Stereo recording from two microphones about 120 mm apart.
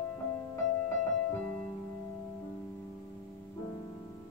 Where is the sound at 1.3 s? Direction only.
10° left (ahead or behind).